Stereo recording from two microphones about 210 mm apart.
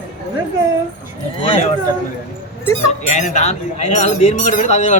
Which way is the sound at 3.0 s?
35° left (ahead or behind).